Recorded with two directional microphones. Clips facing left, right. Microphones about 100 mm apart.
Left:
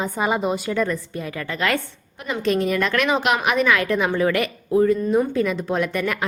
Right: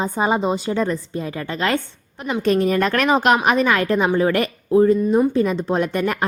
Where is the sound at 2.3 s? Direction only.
40° right (ahead or behind).